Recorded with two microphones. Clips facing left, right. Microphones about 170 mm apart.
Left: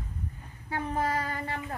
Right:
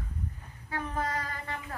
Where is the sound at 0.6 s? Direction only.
30° left (ahead or behind).